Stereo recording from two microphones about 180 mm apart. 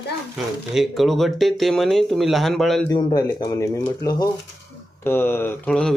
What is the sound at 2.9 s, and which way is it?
Speech, 25° left (ahead or behind).